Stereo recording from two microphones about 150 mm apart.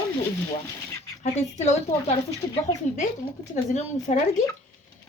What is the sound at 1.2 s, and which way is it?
Speech, 50° left (ahead or behind).